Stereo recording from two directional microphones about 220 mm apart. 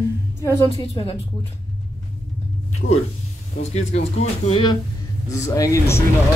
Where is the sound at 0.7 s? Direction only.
20° left (ahead or behind).